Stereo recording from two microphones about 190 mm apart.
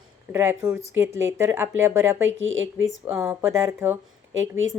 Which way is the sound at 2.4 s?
85° right.